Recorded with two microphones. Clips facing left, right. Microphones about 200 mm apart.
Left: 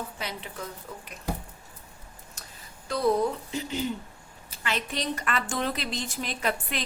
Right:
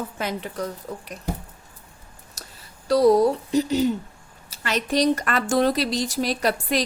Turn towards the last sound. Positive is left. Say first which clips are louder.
# right 7 dB
turn(degrees=-40)  # may be behind; listen again after turning